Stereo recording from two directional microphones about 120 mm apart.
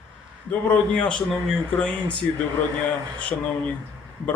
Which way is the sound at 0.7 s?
10° left (ahead or behind).